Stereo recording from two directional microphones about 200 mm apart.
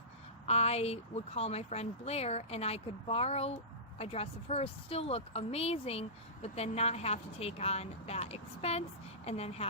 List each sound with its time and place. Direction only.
0.4 s speech: 30° left (ahead or behind)